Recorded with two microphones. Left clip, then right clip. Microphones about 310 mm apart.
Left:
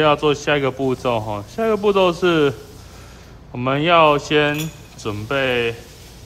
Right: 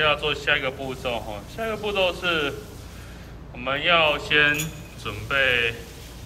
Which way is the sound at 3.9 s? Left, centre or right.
Centre.